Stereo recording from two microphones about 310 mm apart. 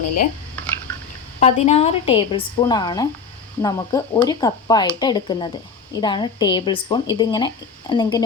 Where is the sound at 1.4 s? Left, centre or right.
Left.